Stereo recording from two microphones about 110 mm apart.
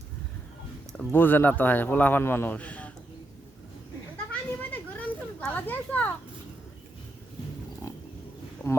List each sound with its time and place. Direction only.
0.9 s a man's voice: 20° left (ahead or behind)
4.3 s children playing: 15° left (ahead or behind)
8.6 s a sound: 10° left (ahead or behind)